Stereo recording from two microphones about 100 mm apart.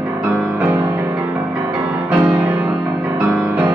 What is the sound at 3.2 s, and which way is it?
Music, 15° right (ahead or behind).